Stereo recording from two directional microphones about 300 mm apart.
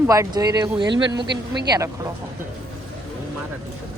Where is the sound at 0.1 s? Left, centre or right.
Centre.